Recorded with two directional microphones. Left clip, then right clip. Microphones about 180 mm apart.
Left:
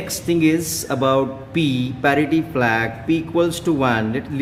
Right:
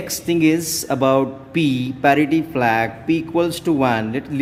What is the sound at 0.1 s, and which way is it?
Speech, 30° right (ahead or behind).